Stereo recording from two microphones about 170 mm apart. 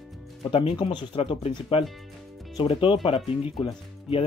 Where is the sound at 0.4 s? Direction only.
35° left (ahead or behind).